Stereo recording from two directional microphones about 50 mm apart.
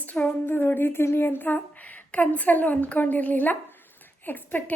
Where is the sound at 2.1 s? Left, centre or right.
Left.